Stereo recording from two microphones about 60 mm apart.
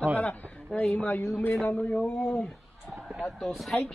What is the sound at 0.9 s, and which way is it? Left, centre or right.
A woman's voice, left.